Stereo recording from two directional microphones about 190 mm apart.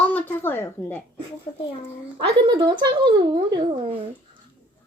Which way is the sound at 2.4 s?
25° right (ahead or behind).